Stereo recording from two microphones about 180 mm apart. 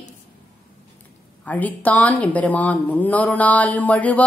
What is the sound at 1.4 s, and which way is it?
Speech, 10° left (ahead or behind).